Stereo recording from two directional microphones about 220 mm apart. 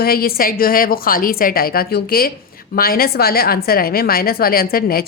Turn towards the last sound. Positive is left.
turn(degrees=40)  # may be behind; listen again after turning